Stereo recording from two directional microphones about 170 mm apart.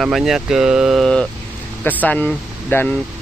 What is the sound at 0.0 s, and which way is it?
Speech, centre (ahead or behind).